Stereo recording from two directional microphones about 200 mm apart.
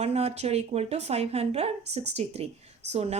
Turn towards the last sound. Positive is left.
turn(degrees=-30)  # may be behind; listen again after turning